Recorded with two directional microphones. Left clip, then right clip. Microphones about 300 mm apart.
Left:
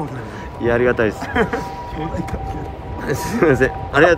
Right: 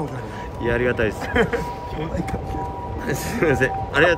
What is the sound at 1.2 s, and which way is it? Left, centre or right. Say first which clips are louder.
Speech: left 1 dB; centre.